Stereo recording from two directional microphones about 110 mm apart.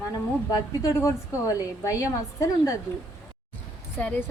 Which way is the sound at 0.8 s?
30° left (ahead or behind).